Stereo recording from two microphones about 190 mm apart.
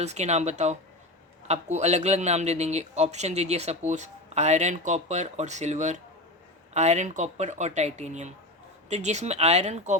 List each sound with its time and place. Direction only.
0.0 s speech: 35° right (ahead or behind)